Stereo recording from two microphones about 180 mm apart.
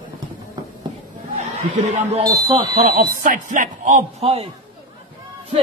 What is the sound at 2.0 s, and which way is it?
Speech, 30° right (ahead or behind).